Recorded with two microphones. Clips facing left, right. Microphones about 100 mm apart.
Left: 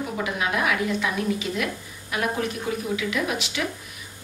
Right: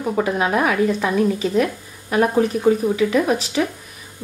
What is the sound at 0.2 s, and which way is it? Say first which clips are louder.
Speech: right 7 dB; 40° right (ahead or behind).